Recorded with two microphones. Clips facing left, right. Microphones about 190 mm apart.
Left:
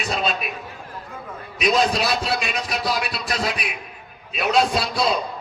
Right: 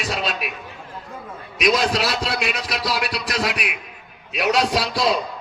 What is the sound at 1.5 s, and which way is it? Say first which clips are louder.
A man's voice: even; 90° right.